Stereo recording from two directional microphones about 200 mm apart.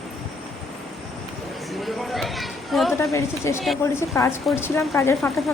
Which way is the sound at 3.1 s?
15° left (ahead or behind).